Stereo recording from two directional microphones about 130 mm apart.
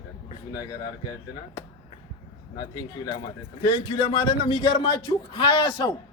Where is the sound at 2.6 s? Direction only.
30° left (ahead or behind).